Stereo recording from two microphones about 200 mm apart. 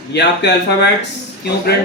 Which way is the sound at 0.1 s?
60° left (ahead or behind).